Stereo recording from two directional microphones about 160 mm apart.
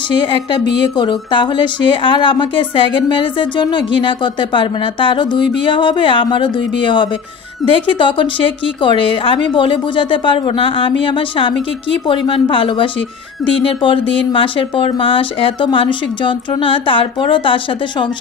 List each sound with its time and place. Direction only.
0.2 s a woman's voice: 30° left (ahead or behind)